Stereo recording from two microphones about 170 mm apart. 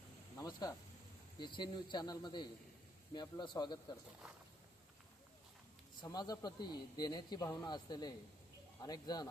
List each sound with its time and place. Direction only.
0.3 s a sound: 20° left (ahead or behind)
1.4 s a man's voice: 25° left (ahead or behind)
6.0 s a man's voice: 25° left (ahead or behind)